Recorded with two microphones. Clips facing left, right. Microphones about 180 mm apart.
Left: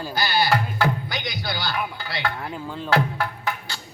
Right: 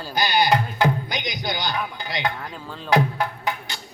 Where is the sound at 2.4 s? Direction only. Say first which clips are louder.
Left 4 dB; 10° left (ahead or behind).